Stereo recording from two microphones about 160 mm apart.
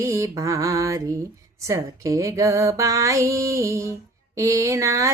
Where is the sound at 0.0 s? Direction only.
20° right (ahead or behind).